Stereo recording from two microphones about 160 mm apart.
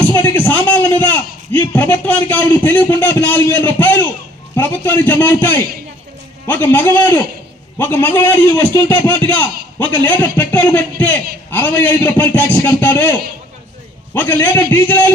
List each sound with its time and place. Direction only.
0.0 s a sound: 10° left (ahead or behind)
0.9 s a man's voice: 10° left (ahead or behind)
9.8 s a man's voice: 30° right (ahead or behind)
10.2 s a man's voice: 10° left (ahead or behind)